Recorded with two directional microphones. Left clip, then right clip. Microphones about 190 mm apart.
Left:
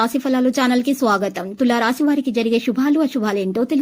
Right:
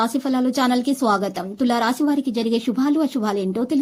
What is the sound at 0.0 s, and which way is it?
A woman's voice, 15° left (ahead or behind).